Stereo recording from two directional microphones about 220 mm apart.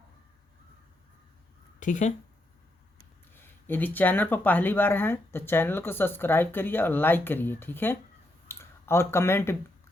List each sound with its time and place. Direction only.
1.8 s speech: 35° left (ahead or behind)
3.3 s speech: 10° left (ahead or behind)